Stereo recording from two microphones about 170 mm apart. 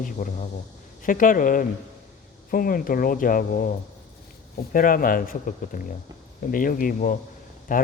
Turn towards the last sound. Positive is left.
turn(degrees=50)  # may be behind; listen again after turning